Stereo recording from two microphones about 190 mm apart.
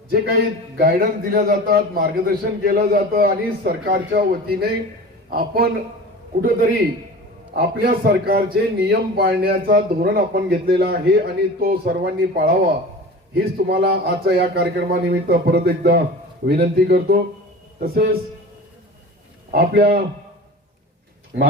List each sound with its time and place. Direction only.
0.1 s a man's voice: 50° right (ahead or behind)
7.5 s a man's voice: 55° right (ahead or behind)
13.7 s a man's voice: 55° right (ahead or behind)
19.5 s a man's voice: 50° right (ahead or behind)